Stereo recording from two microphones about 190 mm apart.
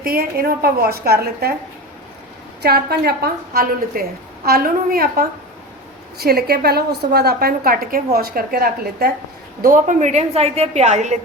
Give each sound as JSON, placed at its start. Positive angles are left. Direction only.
{"t": 0.0, "sound": "a woman's voice", "side_deg": -50}
{"t": 2.6, "sound": "a woman's voice", "side_deg": -55}